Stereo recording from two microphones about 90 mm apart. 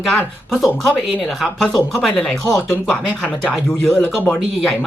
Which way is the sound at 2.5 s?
30° left (ahead or behind).